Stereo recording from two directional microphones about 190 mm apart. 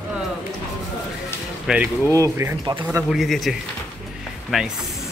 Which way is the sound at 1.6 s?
5° right (ahead or behind).